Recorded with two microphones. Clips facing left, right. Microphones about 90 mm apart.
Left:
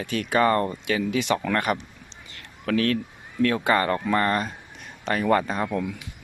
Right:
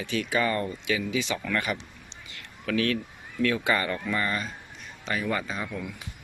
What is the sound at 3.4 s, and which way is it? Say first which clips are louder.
Speech: left 4 dB; 40° left (ahead or behind).